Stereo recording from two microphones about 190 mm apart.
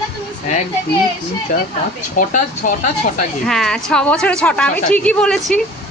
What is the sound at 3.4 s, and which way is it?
A woman's voice, centre (ahead or behind).